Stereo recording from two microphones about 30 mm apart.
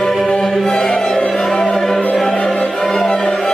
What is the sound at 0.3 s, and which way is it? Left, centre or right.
Music, centre.